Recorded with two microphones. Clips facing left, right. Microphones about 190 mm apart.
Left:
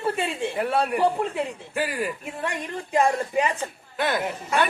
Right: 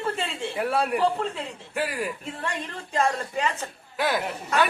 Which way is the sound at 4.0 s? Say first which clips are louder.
Even; 5° right (ahead or behind).